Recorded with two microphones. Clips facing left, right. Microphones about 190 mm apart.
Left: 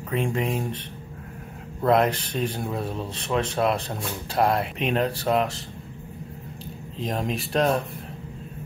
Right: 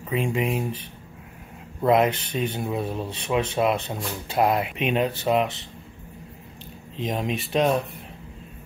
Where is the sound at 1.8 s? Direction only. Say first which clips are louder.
Right 1 dB; 5° right (ahead or behind).